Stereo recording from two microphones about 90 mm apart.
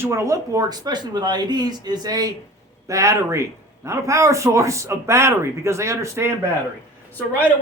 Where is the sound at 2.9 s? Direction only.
35° right (ahead or behind).